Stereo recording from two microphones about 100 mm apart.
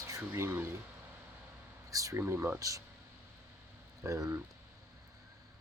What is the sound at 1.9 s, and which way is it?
Speech, 35° right (ahead or behind).